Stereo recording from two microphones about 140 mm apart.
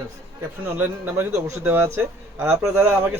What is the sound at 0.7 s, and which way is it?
A man's voice, 15° right (ahead or behind).